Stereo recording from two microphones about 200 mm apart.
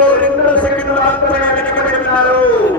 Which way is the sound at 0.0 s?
5° left (ahead or behind).